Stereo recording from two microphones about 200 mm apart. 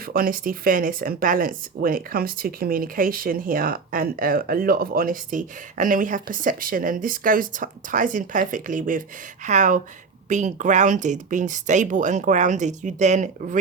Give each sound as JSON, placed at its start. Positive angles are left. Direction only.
{"t": 0.0, "sound": "speech", "side_deg": -45}